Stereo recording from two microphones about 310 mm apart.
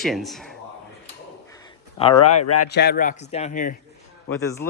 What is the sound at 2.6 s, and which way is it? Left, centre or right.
A man's voice, left.